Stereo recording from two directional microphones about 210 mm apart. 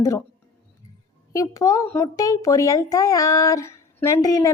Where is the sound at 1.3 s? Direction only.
15° left (ahead or behind).